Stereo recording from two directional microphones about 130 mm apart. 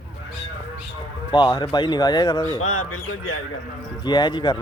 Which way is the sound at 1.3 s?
35° left (ahead or behind).